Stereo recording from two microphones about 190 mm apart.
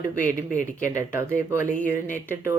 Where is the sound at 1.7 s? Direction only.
10° left (ahead or behind).